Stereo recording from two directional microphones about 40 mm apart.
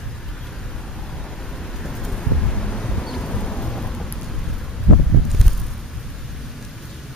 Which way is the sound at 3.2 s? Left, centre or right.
Left.